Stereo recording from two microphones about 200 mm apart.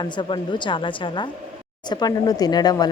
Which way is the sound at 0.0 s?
25° left (ahead or behind).